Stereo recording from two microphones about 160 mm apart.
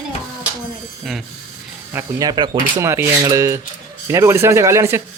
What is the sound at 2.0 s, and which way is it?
A man's voice, 25° right (ahead or behind).